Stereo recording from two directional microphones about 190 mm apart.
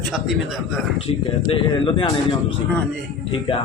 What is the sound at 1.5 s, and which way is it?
Speech, 25° left (ahead or behind).